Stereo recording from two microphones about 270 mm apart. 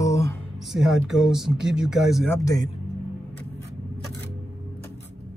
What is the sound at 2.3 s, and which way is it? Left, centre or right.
Speech, centre.